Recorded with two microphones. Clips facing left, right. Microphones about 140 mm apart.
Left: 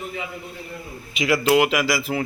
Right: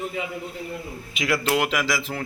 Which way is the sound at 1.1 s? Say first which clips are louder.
Left 5 dB; 5° left (ahead or behind).